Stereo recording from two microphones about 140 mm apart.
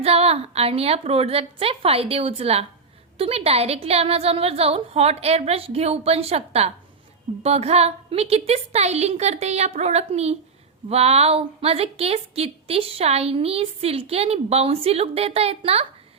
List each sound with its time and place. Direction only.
0.0 s a woman's voice: 45° right (ahead or behind)